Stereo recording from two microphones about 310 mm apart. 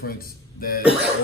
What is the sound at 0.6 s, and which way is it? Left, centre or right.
Cough, left.